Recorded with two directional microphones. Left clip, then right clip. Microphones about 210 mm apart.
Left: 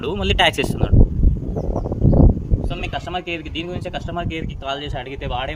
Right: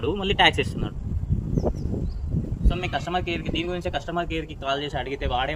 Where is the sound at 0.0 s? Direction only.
50° left (ahead or behind).